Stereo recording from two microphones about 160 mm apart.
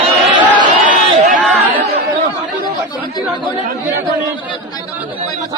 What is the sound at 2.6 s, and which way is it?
Speech, 30° left (ahead or behind).